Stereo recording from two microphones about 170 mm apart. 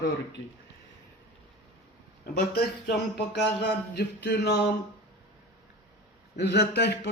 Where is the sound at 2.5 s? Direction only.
70° left (ahead or behind).